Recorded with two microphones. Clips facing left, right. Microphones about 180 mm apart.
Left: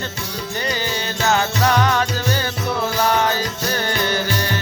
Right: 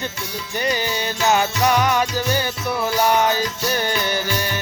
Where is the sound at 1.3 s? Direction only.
15° right (ahead or behind).